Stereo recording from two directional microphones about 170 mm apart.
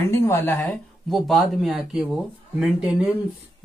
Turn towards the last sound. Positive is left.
turn(degrees=-5)  # may be behind; listen again after turning